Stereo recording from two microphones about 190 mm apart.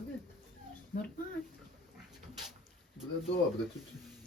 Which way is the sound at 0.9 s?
55° left (ahead or behind).